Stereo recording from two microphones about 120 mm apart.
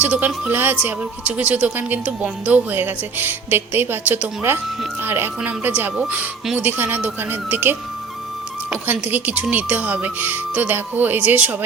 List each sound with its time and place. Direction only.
0.0 s speech: 10° right (ahead or behind)